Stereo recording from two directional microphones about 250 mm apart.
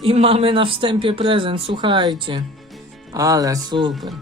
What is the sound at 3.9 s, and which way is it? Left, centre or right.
Speech, centre.